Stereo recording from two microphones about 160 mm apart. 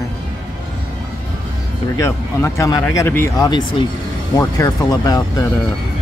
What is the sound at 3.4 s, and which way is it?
Speech, 25° left (ahead or behind).